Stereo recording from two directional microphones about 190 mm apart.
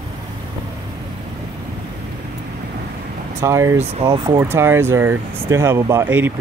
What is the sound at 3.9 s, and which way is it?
Speech, 25° right (ahead or behind).